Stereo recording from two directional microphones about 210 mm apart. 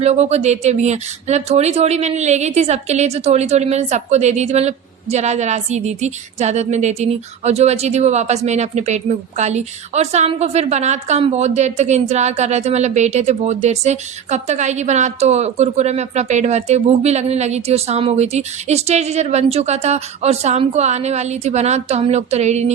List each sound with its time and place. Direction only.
0.0 s speech: 30° right (ahead or behind)